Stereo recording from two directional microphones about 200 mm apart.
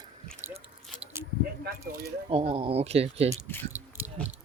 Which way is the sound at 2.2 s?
25° right (ahead or behind).